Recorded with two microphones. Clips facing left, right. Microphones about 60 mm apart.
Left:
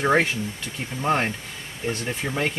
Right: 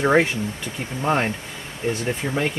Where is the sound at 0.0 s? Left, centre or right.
Centre.